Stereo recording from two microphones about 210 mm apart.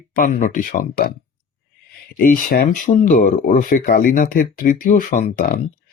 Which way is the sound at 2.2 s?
40° left (ahead or behind).